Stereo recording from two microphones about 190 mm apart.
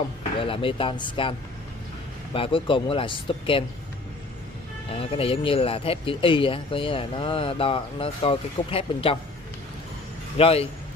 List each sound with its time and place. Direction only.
0.4 s speech: 30° left (ahead or behind)
2.3 s speech: 30° left (ahead or behind)
4.9 s speech: 30° left (ahead or behind)
10.3 s a man's voice: 30° left (ahead or behind)